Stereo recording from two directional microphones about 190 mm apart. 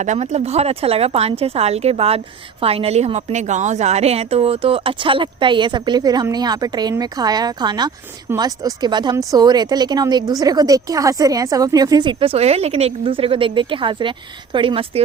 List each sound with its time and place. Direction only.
0.0 s a woman's voice: 40° right (ahead or behind)